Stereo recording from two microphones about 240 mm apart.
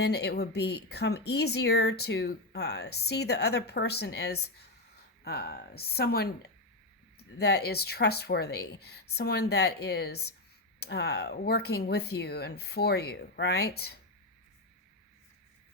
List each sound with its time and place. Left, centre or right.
0.0 s speech: left